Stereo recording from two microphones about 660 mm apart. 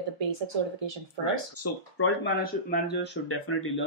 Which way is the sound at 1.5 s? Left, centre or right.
Centre.